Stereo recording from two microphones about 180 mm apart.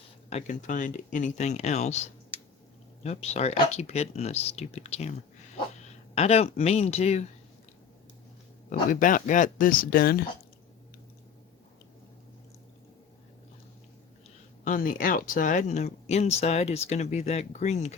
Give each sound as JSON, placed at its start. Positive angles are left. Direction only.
{"t": 0.3, "sound": "speech", "side_deg": 40}
{"t": 6.1, "sound": "speech", "side_deg": 35}
{"t": 8.9, "sound": "speech", "side_deg": 45}
{"t": 14.6, "sound": "speech", "side_deg": 50}